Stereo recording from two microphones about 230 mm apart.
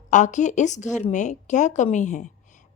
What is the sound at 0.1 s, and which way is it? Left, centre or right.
A woman's voice, left.